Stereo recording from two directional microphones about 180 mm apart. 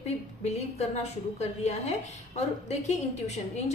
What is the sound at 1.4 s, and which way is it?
A woman's voice, 40° left (ahead or behind).